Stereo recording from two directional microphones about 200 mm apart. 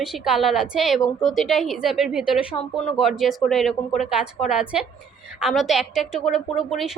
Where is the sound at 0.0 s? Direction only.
Centre (ahead or behind).